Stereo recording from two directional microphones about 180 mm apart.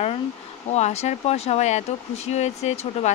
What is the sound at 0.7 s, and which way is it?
Speech, 40° left (ahead or behind).